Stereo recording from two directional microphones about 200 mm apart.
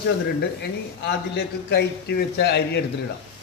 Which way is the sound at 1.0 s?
55° left (ahead or behind).